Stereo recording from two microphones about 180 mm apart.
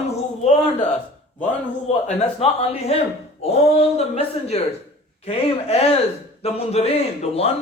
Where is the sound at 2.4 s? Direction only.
35° left (ahead or behind).